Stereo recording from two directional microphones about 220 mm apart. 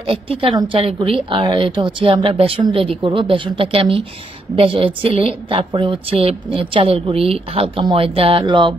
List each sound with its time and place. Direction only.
0.0 s a woman's voice: 25° right (ahead or behind)